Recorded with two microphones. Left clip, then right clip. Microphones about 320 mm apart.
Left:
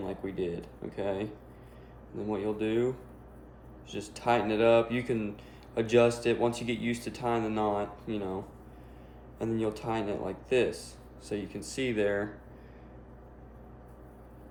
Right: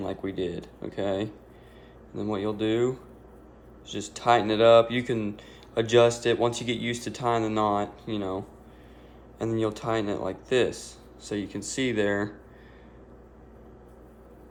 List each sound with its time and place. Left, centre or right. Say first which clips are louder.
0.0 s speech: right 4 dB; right
9.4 s speech: right 4 dB; right